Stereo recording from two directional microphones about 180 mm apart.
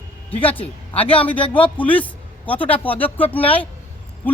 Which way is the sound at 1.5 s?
10° left (ahead or behind).